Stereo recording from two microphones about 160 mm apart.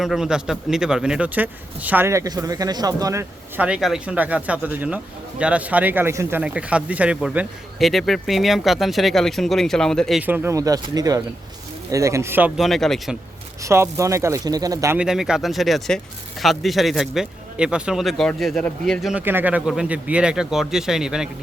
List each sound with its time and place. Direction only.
0.0 s speech: centre (ahead or behind); by 3.2 s 20° right (ahead or behind)
3.6 s speech: 5° right (ahead or behind)
10.2 s speech: 10° right (ahead or behind)
12.5 s speech: centre (ahead or behind)
13.6 s speech: 20° right (ahead or behind)
14.9 s speech: 5° right (ahead or behind)
19.2 s speech: 10° right (ahead or behind)